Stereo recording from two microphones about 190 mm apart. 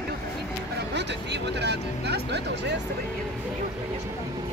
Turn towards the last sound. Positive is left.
turn(degrees=-60)  # may be behind; listen again after turning